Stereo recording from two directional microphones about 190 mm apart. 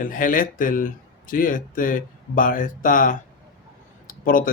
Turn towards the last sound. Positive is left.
turn(degrees=45)  # may be behind; listen again after turning